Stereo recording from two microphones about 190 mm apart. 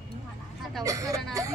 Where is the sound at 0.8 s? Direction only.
15° right (ahead or behind).